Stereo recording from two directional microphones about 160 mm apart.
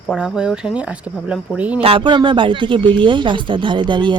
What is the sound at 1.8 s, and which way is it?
Speech, 35° right (ahead or behind).